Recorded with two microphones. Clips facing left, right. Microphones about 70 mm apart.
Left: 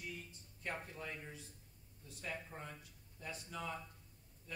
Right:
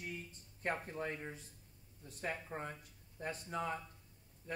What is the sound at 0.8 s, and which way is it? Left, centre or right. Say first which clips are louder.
A man's voice: right 6 dB; right.